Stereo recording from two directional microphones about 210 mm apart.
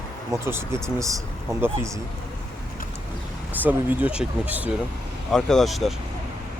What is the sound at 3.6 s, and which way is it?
Speech, 10° right (ahead or behind).